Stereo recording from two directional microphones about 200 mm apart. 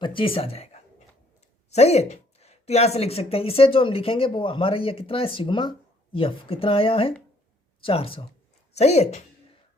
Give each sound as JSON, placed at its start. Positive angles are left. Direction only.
{"t": 0.0, "sound": "a woman's voice", "side_deg": 25}